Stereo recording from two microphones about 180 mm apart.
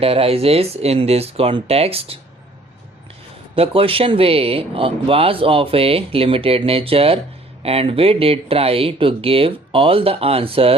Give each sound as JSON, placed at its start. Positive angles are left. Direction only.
{"t": 0.0, "sound": "speech", "side_deg": -35}
{"t": 3.5, "sound": "speech", "side_deg": -30}